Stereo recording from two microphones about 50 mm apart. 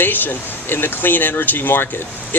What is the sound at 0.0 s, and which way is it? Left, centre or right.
Speech, left.